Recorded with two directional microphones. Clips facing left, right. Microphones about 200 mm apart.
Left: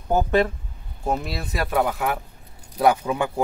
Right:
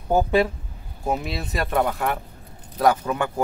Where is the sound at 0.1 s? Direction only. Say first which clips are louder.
Right 1 dB; 10° right (ahead or behind).